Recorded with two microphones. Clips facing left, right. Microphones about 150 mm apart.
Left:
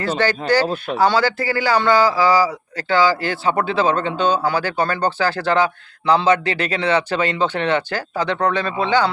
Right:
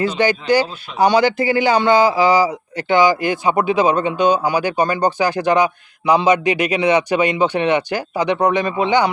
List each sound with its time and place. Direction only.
0.2 s a man's voice: 15° right (ahead or behind)
0.6 s speech: 50° left (ahead or behind)
0.9 s a man's voice: 20° right (ahead or behind)